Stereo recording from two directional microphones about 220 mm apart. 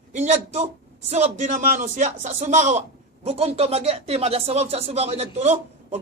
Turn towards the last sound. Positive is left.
turn(degrees=-30)  # may be behind; listen again after turning